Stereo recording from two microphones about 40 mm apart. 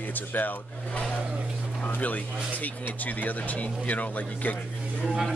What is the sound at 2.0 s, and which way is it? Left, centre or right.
Speech, left.